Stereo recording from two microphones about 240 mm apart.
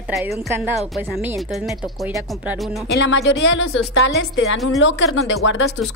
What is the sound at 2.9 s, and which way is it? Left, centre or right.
Speech, left.